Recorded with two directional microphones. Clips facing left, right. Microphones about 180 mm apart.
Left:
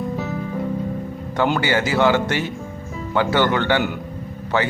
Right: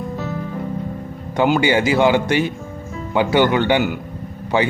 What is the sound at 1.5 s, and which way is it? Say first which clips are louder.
Speech: right 5 dB; 15° right (ahead or behind).